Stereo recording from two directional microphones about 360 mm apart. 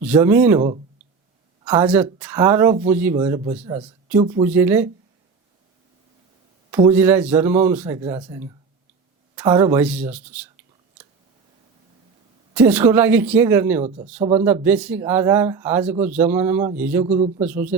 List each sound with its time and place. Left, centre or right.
0.0 s speech: centre
6.7 s a man's voice: centre
12.5 s speech: centre
13.8 s a man's voice: centre
14.4 s speech: centre
17.1 s a man's voice: centre
17.4 s speech: centre